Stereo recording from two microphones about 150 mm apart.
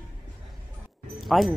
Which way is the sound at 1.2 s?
Centre (ahead or behind).